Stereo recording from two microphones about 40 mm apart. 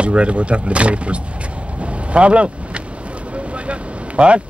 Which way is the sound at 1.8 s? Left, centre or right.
Right.